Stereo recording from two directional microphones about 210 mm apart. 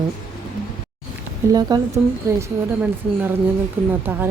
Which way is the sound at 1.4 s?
15° right (ahead or behind).